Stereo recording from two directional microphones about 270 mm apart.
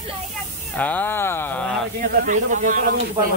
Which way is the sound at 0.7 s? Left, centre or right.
Centre.